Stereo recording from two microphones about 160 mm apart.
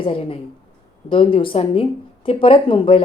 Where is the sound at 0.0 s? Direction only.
35° left (ahead or behind).